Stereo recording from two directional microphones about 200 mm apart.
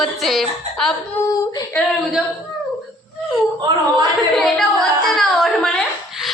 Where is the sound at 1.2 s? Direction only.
15° left (ahead or behind).